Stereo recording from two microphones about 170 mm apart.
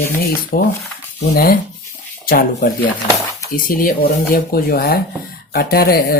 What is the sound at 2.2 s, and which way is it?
Speech, 60° left (ahead or behind).